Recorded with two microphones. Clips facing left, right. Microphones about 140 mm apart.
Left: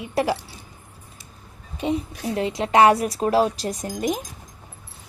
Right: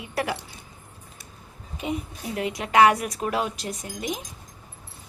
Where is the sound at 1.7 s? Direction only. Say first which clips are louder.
Left 5 dB; 30° left (ahead or behind).